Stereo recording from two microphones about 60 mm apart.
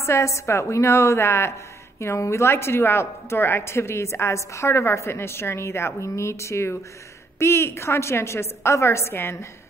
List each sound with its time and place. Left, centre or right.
0.0 s a woman's voice: left